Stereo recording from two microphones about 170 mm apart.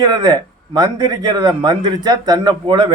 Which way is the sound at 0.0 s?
25° right (ahead or behind).